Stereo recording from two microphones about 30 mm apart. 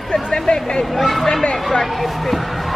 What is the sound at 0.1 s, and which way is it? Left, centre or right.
Speech, left.